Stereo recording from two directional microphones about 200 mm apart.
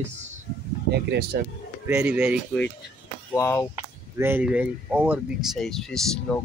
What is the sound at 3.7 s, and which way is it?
Speech, 10° right (ahead or behind).